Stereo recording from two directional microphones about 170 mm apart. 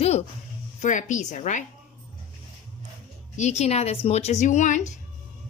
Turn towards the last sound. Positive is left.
turn(degrees=45)  # may be behind; listen again after turning